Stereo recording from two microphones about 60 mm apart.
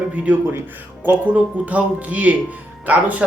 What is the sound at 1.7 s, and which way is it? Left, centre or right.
Speech, right.